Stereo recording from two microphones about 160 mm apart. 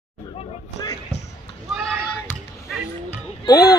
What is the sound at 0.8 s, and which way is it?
Speech, 25° left (ahead or behind).